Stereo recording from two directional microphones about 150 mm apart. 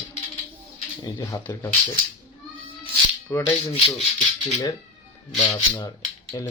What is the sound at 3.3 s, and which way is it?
Speech, 15° left (ahead or behind).